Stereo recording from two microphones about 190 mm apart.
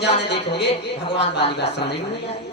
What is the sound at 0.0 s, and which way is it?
Speech, 60° left (ahead or behind).